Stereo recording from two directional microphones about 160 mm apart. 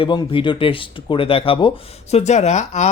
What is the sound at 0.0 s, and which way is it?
Speech, 35° left (ahead or behind).